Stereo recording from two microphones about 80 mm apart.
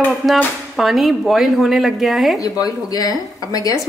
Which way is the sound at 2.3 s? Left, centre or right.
Left.